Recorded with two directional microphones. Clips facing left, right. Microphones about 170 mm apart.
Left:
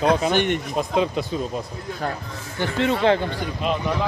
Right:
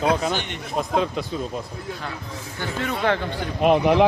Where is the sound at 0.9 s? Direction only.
10° left (ahead or behind).